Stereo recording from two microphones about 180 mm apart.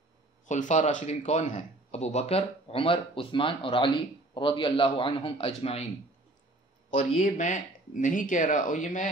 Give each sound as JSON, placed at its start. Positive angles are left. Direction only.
{"t": 0.5, "sound": "a man's voice", "side_deg": 45}
{"t": 7.2, "sound": "speech", "side_deg": 45}